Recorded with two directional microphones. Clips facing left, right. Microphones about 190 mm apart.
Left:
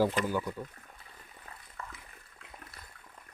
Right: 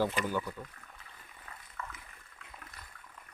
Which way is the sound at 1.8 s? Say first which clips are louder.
Right 1 dB; 35° left (ahead or behind).